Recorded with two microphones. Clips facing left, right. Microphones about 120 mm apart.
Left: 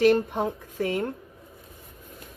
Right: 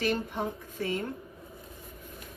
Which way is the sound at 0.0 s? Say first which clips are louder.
Left 9 dB; 70° left (ahead or behind).